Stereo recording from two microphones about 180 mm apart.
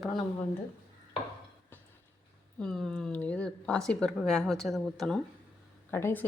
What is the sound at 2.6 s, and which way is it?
Speech, 5° left (ahead or behind).